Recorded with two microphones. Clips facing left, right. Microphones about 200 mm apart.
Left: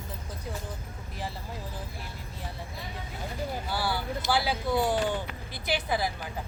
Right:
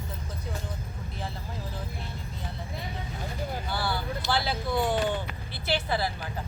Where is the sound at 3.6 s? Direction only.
10° left (ahead or behind).